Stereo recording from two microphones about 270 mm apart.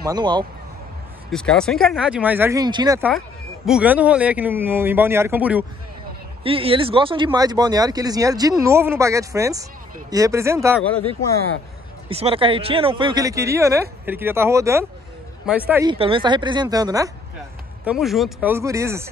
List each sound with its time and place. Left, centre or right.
0.0 s speech: centre
1.3 s speech: centre
3.1 s speech: centre
6.4 s speech: centre
12.1 s speech: right
17.8 s speech: centre